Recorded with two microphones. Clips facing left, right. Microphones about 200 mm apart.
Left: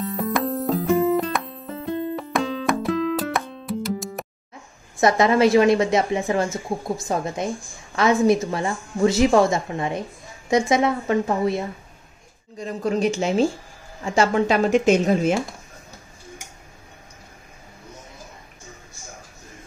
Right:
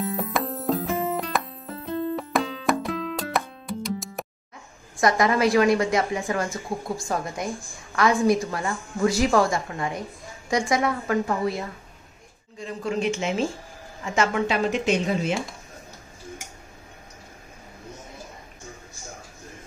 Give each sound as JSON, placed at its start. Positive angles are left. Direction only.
{"t": 0.0, "sound": "music", "side_deg": 0}
{"t": 5.0, "sound": "a woman's voice", "side_deg": 25}
{"t": 12.5, "sound": "speech", "side_deg": 40}